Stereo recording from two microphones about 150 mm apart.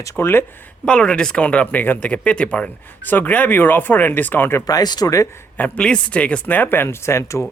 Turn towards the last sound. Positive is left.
turn(degrees=20)  # may be behind; listen again after turning